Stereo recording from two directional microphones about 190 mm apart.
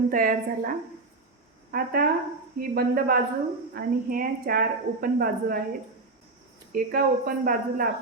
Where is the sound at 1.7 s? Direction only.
50° right (ahead or behind).